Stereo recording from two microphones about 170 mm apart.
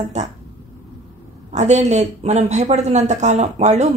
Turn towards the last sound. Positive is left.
turn(degrees=-40)  # may be behind; listen again after turning